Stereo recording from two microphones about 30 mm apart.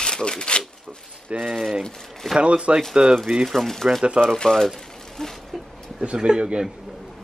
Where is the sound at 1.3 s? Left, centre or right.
Right.